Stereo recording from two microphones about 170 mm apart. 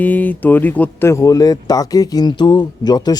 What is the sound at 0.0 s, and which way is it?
Speech, 10° left (ahead or behind).